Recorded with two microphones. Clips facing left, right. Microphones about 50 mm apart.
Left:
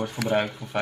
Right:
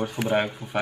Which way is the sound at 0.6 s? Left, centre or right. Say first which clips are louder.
Even; right.